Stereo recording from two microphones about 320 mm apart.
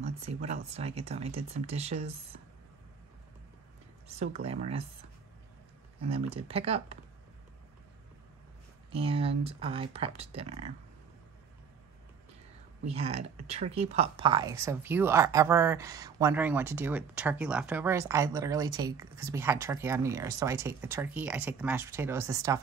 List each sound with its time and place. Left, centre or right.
0.0 s speech: right
4.3 s speech: centre
5.9 s speech: centre
8.9 s speech: centre
12.8 s speech: centre